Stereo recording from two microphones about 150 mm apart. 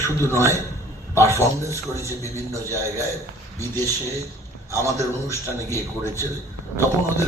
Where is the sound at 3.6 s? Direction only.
15° left (ahead or behind).